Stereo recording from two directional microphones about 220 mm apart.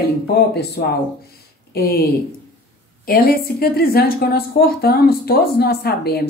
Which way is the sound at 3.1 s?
45° left (ahead or behind).